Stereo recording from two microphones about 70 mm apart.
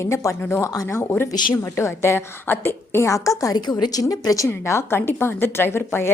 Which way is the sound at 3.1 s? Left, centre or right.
Left.